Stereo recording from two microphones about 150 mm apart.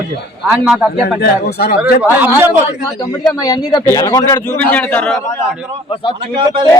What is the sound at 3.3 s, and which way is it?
A man's voice, 25° left (ahead or behind).